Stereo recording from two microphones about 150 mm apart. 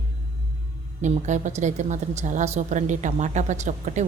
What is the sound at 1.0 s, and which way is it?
Speech, 50° right (ahead or behind).